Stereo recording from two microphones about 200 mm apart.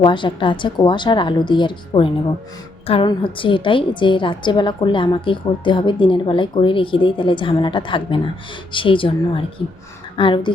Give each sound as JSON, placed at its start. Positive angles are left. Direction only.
{"t": 0.0, "sound": "a woman's voice", "side_deg": 25}